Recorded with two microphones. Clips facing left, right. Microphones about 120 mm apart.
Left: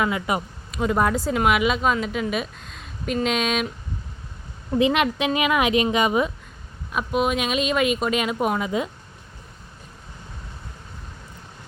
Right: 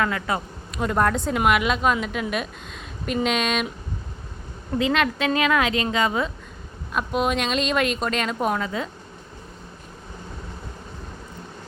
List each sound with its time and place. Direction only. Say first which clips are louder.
0.0 s a woman's voice: left 1 dB; 15° left (ahead or behind)
0.7 s speech: left 1 dB; centre (ahead or behind)
4.8 s a woman's voice: left 2 dB; 15° left (ahead or behind)
6.9 s speech: left 1 dB; centre (ahead or behind)